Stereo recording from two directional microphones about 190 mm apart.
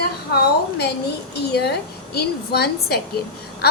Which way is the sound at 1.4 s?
60° left (ahead or behind).